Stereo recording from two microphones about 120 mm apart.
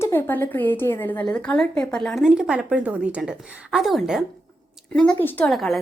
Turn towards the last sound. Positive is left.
turn(degrees=0)  # may be behind; listen again after turning